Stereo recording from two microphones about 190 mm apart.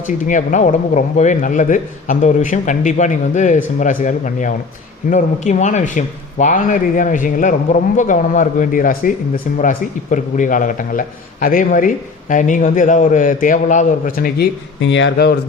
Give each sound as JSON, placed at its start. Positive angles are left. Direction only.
{"t": 0.3, "sound": "a man's voice", "side_deg": 40}
{"t": 14.8, "sound": "speech", "side_deg": 75}